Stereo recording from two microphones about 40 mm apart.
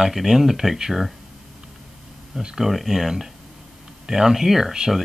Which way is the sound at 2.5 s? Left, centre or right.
Centre.